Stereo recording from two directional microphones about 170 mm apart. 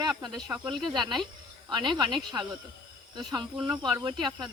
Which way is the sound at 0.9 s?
30° right (ahead or behind).